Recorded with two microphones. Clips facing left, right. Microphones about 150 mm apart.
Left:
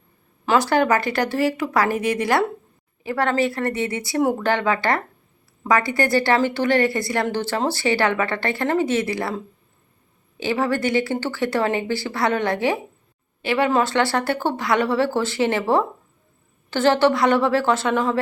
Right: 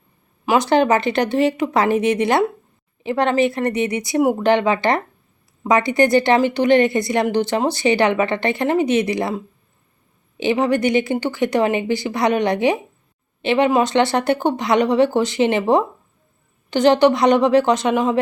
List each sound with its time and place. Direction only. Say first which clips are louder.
0.4 s a woman's voice: right 3 dB; 20° right (ahead or behind)